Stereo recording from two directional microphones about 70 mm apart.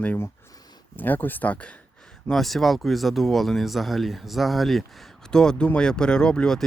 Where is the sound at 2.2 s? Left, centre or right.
Centre.